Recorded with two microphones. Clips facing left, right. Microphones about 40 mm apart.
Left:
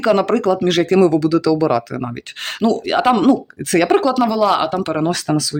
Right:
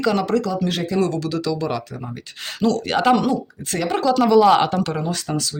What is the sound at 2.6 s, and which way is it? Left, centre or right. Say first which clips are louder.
Speech: left 3 dB; centre.